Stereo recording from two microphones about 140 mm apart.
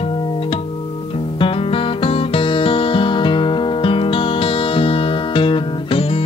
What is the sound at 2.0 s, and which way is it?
Music, 40° left (ahead or behind).